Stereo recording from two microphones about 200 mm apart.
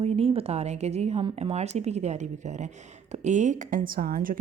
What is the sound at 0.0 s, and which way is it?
A woman's voice, 30° right (ahead or behind).